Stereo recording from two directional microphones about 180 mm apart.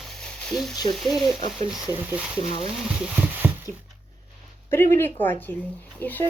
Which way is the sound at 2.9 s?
5° right (ahead or behind).